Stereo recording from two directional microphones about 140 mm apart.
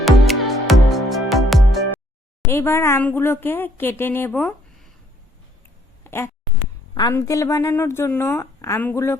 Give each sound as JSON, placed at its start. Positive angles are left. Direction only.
{"t": 0.0, "sound": "music", "side_deg": 0}
{"t": 2.5, "sound": "speech", "side_deg": 20}
{"t": 6.1, "sound": "a woman's voice", "side_deg": 15}